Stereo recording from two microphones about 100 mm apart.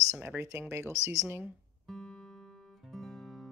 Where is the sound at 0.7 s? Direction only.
30° right (ahead or behind).